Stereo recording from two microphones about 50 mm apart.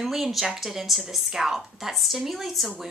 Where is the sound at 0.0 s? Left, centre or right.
Centre.